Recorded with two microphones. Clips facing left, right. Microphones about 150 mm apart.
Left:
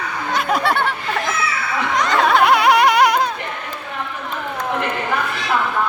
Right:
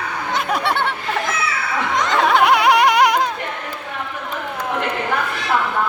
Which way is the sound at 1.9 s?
20° right (ahead or behind).